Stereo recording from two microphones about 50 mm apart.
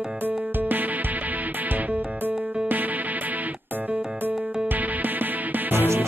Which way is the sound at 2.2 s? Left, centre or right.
Right.